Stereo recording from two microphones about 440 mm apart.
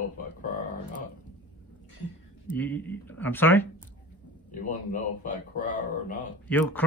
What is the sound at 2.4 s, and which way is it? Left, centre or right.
Speech, centre.